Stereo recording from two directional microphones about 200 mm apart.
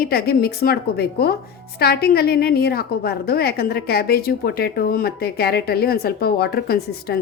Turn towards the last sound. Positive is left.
turn(degrees=50)  # may be behind; listen again after turning